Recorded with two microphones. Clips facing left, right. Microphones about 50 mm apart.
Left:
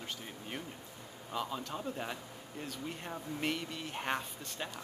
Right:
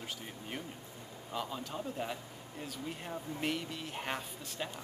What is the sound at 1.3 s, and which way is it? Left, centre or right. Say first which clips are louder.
Speech: left 1 dB; centre.